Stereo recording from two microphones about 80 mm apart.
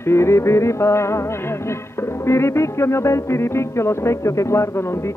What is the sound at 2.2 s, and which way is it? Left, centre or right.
Speech, left.